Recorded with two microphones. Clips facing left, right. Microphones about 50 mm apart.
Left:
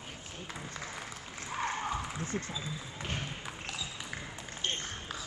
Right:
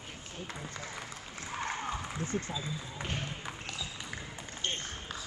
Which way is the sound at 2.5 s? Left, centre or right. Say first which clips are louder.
Right 2 dB; centre.